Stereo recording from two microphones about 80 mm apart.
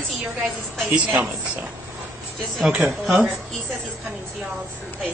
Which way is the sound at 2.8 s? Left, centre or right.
Centre.